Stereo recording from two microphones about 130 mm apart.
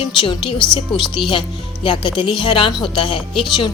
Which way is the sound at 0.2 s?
40° left (ahead or behind).